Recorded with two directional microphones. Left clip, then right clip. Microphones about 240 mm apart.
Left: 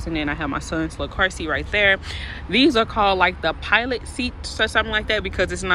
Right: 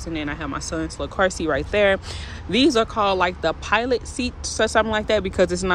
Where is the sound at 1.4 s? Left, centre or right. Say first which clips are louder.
Right 1 dB; centre.